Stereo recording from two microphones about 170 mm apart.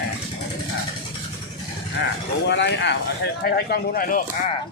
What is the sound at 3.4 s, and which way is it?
Speech, 65° left (ahead or behind).